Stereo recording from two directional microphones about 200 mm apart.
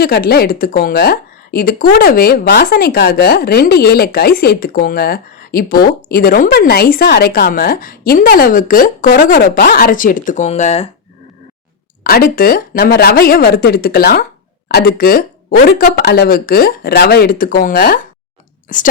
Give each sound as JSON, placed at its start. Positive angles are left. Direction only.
{"t": 0.0, "sound": "a woman's voice", "side_deg": 50}
{"t": 12.0, "sound": "a woman's voice", "side_deg": 45}